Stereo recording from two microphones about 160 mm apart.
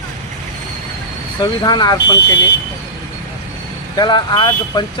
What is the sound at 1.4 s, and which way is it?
Speech, 25° left (ahead or behind).